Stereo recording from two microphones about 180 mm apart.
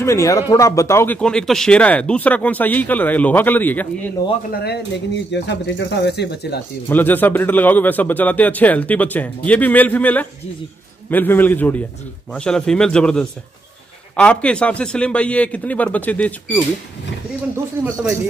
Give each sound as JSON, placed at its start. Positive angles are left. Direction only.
{"t": 0.0, "sound": "speech", "side_deg": 15}
{"t": 4.5, "sound": "speech", "side_deg": 60}
{"t": 5.3, "sound": "speech", "side_deg": 75}
{"t": 6.9, "sound": "a man's voice", "side_deg": 10}
{"t": 17.8, "sound": "speech", "side_deg": -10}